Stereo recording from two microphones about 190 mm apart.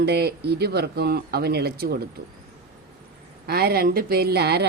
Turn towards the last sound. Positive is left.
turn(degrees=-60)  # may be behind; listen again after turning